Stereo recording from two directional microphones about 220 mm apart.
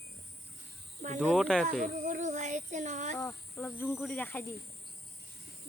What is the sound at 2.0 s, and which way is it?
Child singing, 35° right (ahead or behind).